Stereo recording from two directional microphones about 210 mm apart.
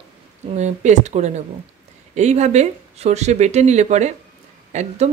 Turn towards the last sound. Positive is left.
turn(degrees=-35)  # may be behind; listen again after turning